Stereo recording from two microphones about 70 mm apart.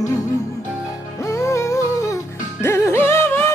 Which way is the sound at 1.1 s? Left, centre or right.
Left.